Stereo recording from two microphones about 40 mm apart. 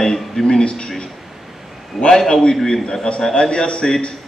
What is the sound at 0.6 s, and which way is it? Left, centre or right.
Speech, left.